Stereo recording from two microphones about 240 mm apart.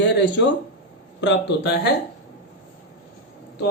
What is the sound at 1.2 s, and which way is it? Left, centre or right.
Speech, left.